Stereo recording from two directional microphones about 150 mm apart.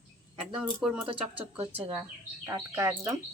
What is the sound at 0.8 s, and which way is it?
Speech, 5° right (ahead or behind).